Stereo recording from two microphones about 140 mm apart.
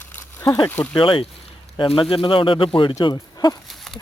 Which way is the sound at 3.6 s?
Centre (ahead or behind).